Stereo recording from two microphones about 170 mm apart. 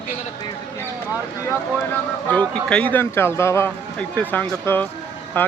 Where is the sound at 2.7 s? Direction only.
10° left (ahead or behind).